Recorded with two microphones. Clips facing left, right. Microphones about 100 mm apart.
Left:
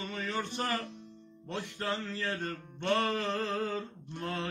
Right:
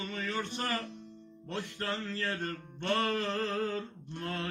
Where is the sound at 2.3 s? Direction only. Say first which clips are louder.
Even; centre (ahead or behind).